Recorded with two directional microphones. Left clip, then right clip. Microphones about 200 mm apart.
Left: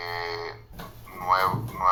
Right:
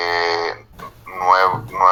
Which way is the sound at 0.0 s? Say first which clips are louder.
Right 13 dB; 45° right (ahead or behind).